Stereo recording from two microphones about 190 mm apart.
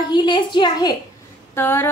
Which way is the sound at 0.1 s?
25° left (ahead or behind).